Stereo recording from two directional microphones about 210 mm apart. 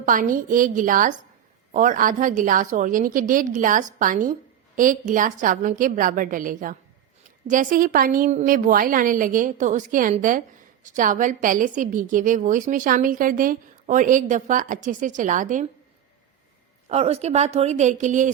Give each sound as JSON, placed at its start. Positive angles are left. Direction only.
{"t": 0.0, "sound": "a woman's voice", "side_deg": -40}
{"t": 16.9, "sound": "a woman's voice", "side_deg": -30}